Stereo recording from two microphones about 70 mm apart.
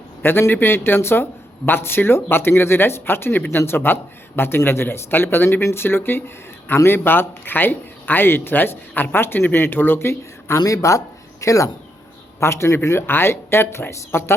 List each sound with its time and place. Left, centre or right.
0.2 s speech: left
10.6 s speech: left